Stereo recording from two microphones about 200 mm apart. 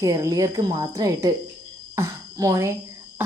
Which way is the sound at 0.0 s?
15° right (ahead or behind).